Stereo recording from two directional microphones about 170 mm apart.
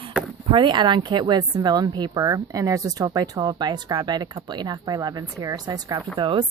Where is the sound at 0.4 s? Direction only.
30° right (ahead or behind).